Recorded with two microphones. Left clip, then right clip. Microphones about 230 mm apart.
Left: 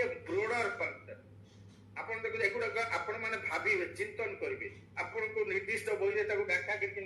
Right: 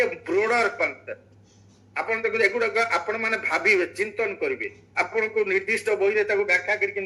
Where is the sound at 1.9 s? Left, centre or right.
Right.